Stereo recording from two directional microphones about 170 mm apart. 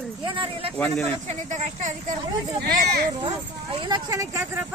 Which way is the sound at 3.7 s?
30° right (ahead or behind).